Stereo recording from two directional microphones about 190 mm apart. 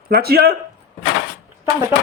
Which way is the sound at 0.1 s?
55° right (ahead or behind).